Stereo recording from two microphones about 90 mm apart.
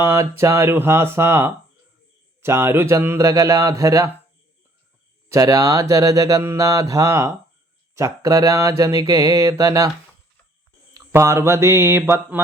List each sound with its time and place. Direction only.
0.0 s speech: 30° right (ahead or behind)
5.3 s speech: 40° right (ahead or behind)
11.1 s speech: 30° right (ahead or behind)